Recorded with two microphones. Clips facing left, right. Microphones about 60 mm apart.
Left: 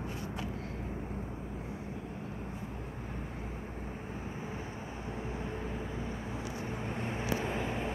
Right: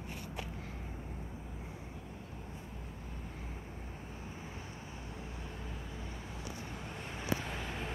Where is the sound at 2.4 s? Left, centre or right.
Left.